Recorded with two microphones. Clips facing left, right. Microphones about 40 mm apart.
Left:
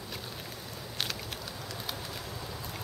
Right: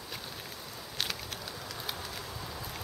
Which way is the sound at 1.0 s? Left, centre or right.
Centre.